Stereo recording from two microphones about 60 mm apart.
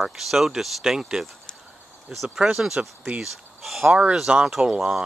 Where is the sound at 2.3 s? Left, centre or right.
Centre.